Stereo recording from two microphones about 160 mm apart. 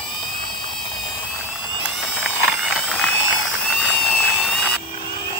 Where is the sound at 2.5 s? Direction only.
Centre (ahead or behind).